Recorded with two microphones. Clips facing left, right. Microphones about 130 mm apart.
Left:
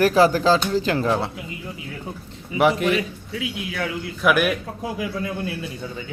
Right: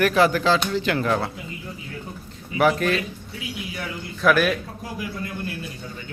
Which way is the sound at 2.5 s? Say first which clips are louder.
Left 1 dB; 20° left (ahead or behind).